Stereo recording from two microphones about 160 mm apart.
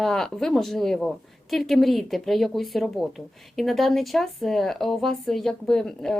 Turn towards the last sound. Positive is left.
turn(degrees=5)  # may be behind; listen again after turning